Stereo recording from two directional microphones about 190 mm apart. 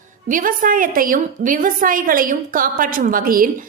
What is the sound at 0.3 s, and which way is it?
A woman's voice, 45° right (ahead or behind).